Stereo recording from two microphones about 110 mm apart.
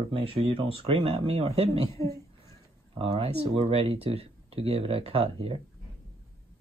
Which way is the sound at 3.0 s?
65° right (ahead or behind).